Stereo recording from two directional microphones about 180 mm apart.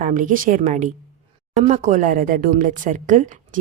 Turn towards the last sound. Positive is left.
turn(degrees=-45)  # may be behind; listen again after turning